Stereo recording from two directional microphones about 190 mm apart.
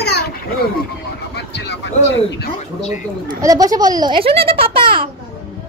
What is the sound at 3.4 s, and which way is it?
A child's voice, 20° right (ahead or behind).